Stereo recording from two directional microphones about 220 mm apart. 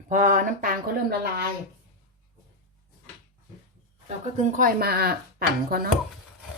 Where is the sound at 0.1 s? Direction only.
35° right (ahead or behind).